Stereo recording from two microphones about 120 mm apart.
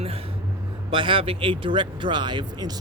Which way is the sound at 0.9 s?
45° right (ahead or behind).